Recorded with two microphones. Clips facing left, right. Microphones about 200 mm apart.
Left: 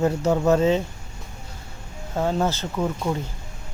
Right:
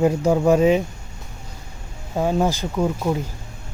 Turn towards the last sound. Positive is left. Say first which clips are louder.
# right 3 dB
turn(degrees=-10)  # may be behind; listen again after turning